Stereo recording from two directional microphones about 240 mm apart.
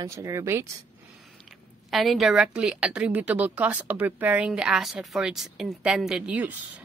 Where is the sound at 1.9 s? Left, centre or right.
Centre.